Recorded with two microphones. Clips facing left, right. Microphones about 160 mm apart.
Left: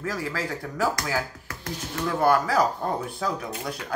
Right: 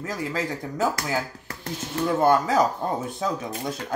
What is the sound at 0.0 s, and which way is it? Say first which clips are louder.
Speech: right 1 dB; 20° right (ahead or behind).